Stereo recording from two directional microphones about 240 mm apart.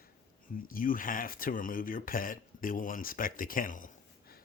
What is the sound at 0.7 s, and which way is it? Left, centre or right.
Speech, left.